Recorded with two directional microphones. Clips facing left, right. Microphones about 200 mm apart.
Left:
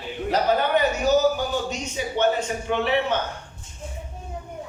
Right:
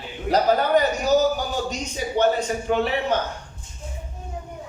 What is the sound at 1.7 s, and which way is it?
Speech, 40° right (ahead or behind).